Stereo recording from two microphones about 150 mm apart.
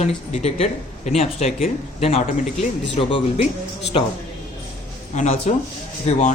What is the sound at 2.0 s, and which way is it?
Speech, 45° left (ahead or behind).